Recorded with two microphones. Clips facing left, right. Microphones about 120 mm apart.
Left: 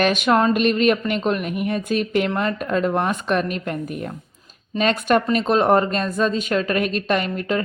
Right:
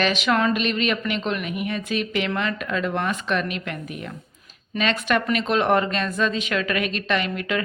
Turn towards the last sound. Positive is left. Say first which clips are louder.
# left 3 dB
turn(degrees=40)  # may be behind; listen again after turning